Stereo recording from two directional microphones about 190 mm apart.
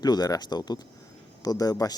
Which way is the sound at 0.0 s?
20° left (ahead or behind).